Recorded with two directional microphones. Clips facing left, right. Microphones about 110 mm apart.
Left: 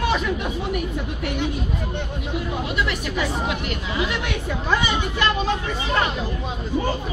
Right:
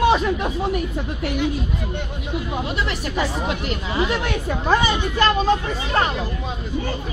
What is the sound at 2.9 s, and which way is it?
Speech, 35° right (ahead or behind).